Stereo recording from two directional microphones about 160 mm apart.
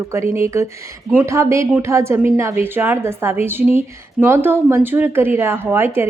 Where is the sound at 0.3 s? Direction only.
15° right (ahead or behind).